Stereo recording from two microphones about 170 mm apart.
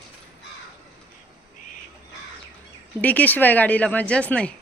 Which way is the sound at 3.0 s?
10° left (ahead or behind).